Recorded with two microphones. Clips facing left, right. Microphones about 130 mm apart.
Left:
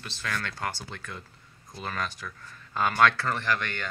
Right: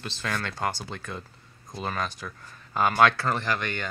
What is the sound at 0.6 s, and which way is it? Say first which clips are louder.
Speech: right 4 dB; 20° right (ahead or behind).